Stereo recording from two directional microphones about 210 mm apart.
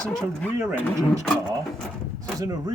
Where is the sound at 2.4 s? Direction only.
20° right (ahead or behind).